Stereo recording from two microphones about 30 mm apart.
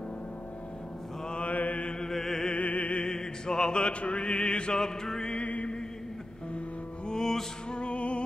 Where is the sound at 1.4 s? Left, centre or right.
Left.